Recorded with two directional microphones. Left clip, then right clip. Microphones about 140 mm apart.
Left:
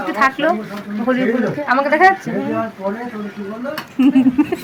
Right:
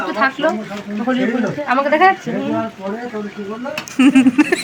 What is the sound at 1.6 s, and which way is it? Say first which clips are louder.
Speech: even; 10° left (ahead or behind).